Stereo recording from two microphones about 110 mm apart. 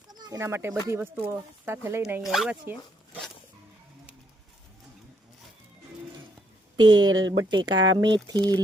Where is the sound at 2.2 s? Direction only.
5° right (ahead or behind).